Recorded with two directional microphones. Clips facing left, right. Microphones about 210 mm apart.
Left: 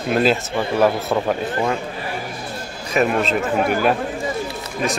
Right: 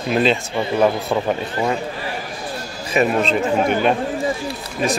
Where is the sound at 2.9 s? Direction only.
Centre (ahead or behind).